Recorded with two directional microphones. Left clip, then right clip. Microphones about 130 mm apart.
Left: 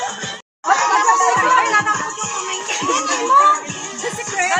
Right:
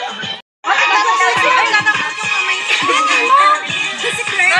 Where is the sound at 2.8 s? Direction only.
20° left (ahead or behind).